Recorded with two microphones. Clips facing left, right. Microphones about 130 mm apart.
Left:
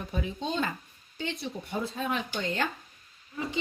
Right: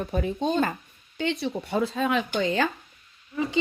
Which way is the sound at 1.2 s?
80° right.